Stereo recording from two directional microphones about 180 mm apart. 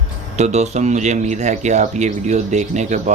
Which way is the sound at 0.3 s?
40° right (ahead or behind).